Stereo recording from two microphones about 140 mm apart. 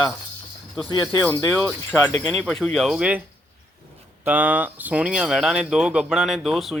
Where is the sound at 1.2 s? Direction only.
10° left (ahead or behind); by 3.2 s 5° right (ahead or behind).